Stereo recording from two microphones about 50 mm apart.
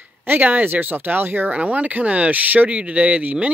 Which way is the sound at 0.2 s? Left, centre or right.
Right.